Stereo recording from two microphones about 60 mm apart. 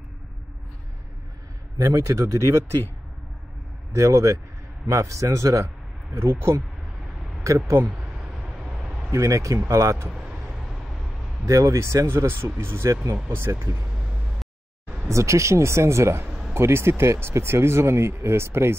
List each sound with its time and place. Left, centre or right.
1.8 s speech: right
3.9 s speech: right
8.0 s vehicle: centre
9.1 s speech: right
10.2 s a sound: centre
10.5 s vehicle: centre
11.4 s speech: right
12.3 s speech: right
13.8 s vehicle: centre
15.0 s speech: right
16.3 s a sound: centre
16.5 s speech: right